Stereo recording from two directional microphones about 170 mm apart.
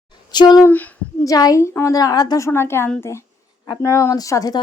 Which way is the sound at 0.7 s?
10° left (ahead or behind).